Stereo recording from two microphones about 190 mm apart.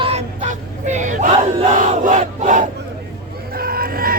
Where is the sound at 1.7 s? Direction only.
40° right (ahead or behind).